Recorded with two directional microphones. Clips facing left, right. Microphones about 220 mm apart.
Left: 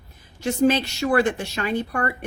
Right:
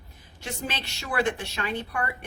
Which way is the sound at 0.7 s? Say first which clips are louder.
Left 13 dB; 45° left (ahead or behind).